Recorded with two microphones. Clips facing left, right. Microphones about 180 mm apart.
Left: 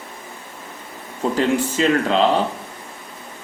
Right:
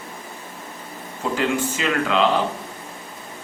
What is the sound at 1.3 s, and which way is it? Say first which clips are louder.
Speech: left 3 dB; 35° left (ahead or behind).